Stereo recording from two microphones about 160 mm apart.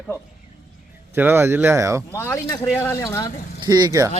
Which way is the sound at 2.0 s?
15° left (ahead or behind).